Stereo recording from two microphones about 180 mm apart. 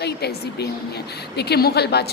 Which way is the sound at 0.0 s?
65° left (ahead or behind).